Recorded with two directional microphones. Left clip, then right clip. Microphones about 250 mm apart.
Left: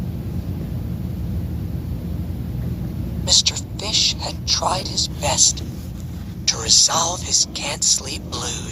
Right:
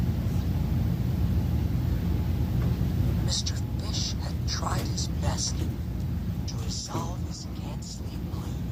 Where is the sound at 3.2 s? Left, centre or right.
Left.